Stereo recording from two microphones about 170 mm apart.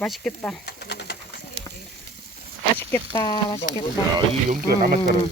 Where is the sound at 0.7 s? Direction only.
80° left.